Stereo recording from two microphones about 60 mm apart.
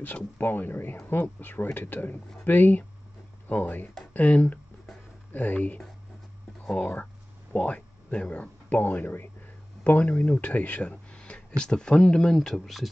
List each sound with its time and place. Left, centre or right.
0.0 s speech: left; by 12.8 s centre